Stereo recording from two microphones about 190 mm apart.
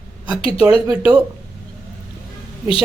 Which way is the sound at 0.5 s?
5° right (ahead or behind).